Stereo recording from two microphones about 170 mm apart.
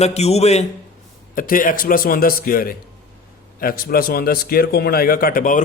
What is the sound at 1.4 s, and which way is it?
A man's voice, 55° left (ahead or behind).